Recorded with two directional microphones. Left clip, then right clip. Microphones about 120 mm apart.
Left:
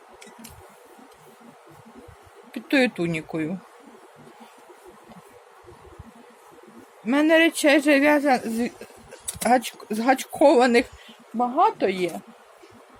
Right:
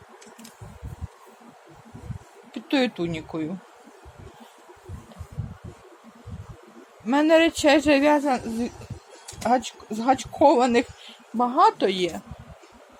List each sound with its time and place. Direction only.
2.5 s speech: 10° left (ahead or behind)
7.1 s speech: 5° left (ahead or behind)
8.2 s speech: 15° left (ahead or behind)
11.3 s speech: 30° right (ahead or behind)
11.6 s speech: 15° right (ahead or behind)